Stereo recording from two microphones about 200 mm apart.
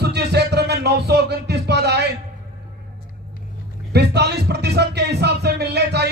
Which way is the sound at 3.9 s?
55° right (ahead or behind).